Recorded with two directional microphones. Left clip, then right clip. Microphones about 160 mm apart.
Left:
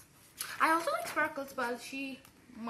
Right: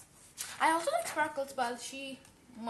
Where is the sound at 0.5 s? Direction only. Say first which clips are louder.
Even; 25° right (ahead or behind).